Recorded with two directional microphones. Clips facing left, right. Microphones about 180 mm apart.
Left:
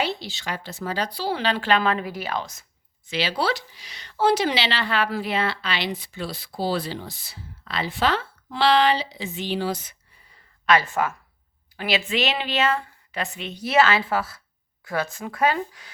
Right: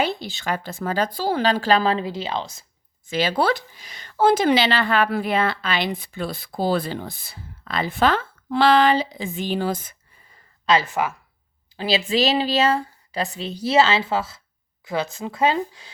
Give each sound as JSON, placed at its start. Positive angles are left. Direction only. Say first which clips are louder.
{"t": 0.0, "sound": "speech", "louder": "right 3 dB", "side_deg": -50}
{"t": 3.1, "sound": "speech", "louder": "right 4 dB", "side_deg": -50}
{"t": 10.7, "sound": "speech", "louder": "right 1 dB", "side_deg": -20}
{"t": 11.8, "sound": "speech", "louder": "right 4 dB", "side_deg": -30}